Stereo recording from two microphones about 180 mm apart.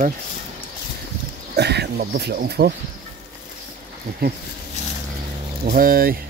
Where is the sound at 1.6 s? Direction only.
65° right (ahead or behind).